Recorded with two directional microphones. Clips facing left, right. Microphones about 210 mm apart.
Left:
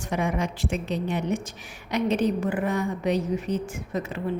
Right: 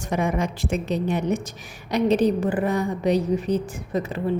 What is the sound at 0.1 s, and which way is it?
A woman's voice, 45° right (ahead or behind).